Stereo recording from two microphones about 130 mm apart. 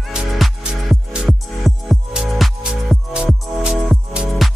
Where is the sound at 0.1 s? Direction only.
5° right (ahead or behind).